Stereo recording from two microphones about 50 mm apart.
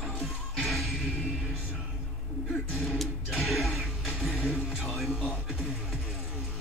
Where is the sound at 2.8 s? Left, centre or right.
Centre.